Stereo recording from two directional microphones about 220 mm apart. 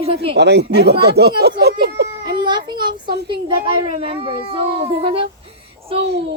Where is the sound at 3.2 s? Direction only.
25° right (ahead or behind).